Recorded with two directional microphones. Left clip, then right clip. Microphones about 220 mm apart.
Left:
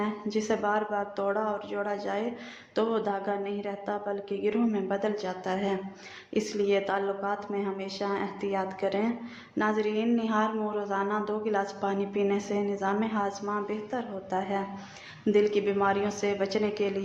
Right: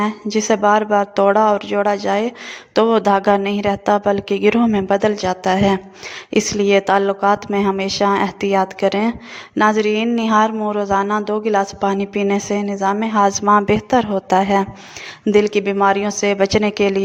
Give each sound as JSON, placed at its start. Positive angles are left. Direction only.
{"t": 0.0, "sound": "a woman's voice", "side_deg": -45}